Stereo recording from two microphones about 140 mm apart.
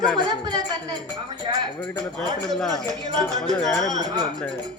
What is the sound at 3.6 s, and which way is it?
Speech, centre (ahead or behind).